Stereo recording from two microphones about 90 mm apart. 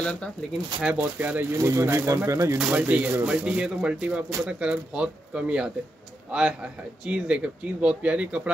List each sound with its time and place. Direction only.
0.0 s speech: 10° left (ahead or behind)
0.8 s speech: 15° right (ahead or behind)
1.6 s speech: 30° right (ahead or behind)
2.8 s speech: 20° right (ahead or behind)